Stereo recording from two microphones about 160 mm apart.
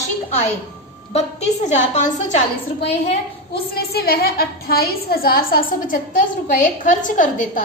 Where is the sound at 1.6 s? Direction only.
50° left (ahead or behind).